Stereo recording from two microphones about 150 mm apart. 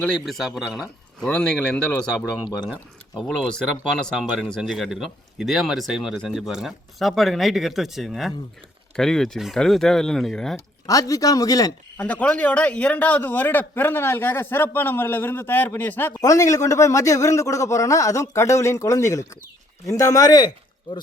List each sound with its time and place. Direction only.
0.0 s speech: centre (ahead or behind)
3.2 s speech: 5° left (ahead or behind)
10.8 s speech: 25° left (ahead or behind)
11.9 s a man's voice: 10° left (ahead or behind); by 20.5 s 25° left (ahead or behind)